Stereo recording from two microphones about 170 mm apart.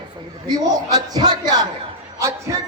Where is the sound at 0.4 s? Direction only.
20° right (ahead or behind).